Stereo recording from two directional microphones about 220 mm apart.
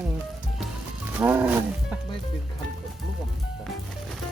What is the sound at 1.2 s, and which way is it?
Speech, 10° right (ahead or behind).